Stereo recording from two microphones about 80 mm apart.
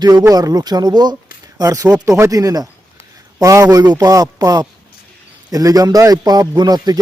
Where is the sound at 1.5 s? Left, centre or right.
Right.